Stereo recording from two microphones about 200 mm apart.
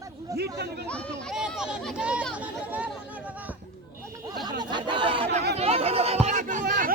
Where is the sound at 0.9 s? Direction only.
5° left (ahead or behind).